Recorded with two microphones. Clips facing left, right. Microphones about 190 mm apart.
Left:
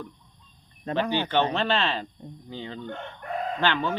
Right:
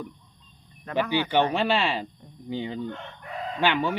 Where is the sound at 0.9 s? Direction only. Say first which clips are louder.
Even; 30° left (ahead or behind).